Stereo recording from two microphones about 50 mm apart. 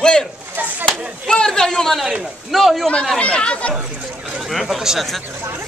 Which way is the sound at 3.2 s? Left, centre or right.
Left.